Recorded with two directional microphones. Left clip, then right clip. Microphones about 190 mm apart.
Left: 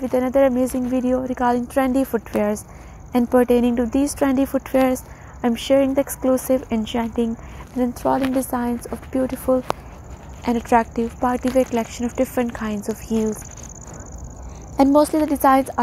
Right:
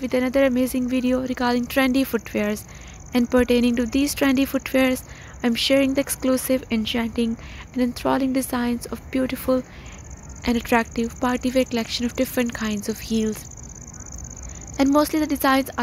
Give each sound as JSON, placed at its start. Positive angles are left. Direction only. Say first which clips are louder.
{"t": 0.0, "sound": "a woman's voice", "louder": "left 3 dB", "side_deg": -25}
{"t": 6.5, "sound": "a woman's voice", "louder": "left 2 dB", "side_deg": -15}
{"t": 9.1, "sound": "speech", "louder": "left 2 dB", "side_deg": -30}
{"t": 14.9, "sound": "a woman's voice", "louder": "left 2 dB", "side_deg": -5}